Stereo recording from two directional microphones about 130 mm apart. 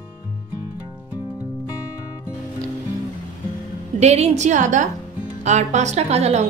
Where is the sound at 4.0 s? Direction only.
60° right (ahead or behind).